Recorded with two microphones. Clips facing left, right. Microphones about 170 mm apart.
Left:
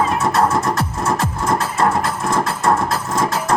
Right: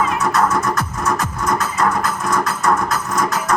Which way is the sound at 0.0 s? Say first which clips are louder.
Left 1 dB; 25° left (ahead or behind).